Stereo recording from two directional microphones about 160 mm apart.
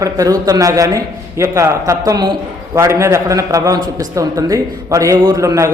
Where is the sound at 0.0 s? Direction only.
20° right (ahead or behind).